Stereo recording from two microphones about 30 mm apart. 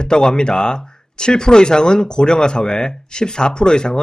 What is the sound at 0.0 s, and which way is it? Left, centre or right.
Speech, left.